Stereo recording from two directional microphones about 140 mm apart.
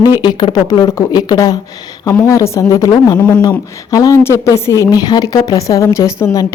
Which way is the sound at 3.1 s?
10° left (ahead or behind).